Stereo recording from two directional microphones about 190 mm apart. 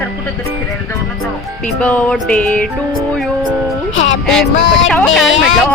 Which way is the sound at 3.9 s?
90° left.